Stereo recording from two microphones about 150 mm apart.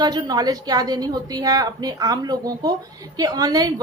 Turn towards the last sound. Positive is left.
turn(degrees=-25)  # may be behind; listen again after turning